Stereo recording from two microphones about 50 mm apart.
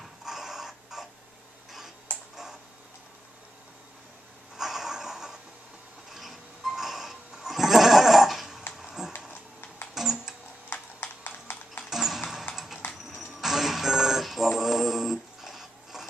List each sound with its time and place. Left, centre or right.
0.2 s printer: centre
4.6 s a sound: centre
6.1 s goat: centre
8.7 s a sound: centre
9.3 s typing: left
9.9 s music: centre
10.7 s clip-clop: left
11.9 s a sound: centre
12.5 s typing: centre
13.2 s music: centre